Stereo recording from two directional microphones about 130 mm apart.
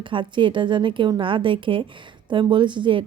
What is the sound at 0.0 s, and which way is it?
Speech, 40° right (ahead or behind).